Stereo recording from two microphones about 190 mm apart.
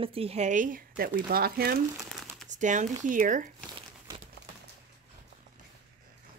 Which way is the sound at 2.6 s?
40° right (ahead or behind).